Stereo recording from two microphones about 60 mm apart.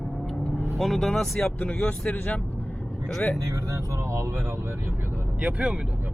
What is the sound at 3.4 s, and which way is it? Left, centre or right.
Speech, right.